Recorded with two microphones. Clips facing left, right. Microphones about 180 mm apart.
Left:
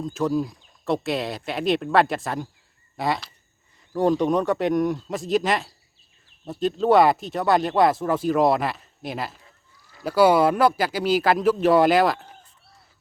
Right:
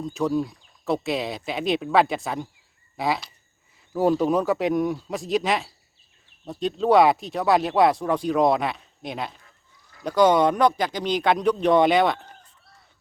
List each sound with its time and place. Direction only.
0.0 s speech: centre (ahead or behind)